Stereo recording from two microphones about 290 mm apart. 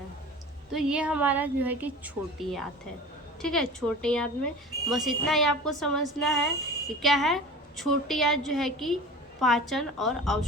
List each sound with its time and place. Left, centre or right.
0.7 s a woman's voice: centre